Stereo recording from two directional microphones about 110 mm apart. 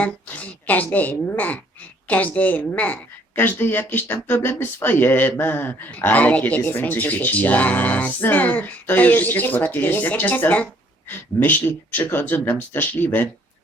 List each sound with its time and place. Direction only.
0.0 s a woman's voice: 15° left (ahead or behind)